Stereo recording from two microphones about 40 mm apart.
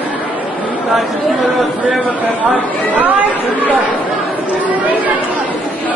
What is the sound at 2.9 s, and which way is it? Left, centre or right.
Chatter, right.